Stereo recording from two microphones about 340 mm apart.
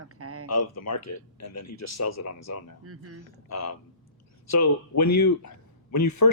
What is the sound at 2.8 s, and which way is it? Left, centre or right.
Speech, right.